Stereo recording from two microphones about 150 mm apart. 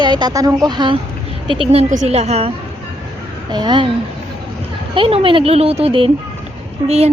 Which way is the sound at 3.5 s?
30° right (ahead or behind).